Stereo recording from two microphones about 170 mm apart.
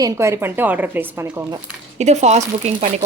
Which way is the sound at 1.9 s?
40° right (ahead or behind).